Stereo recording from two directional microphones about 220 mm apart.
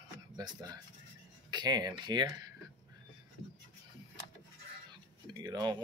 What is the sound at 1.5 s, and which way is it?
Speech, 20° right (ahead or behind).